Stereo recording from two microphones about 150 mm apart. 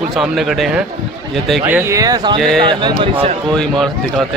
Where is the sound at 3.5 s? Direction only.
5° left (ahead or behind).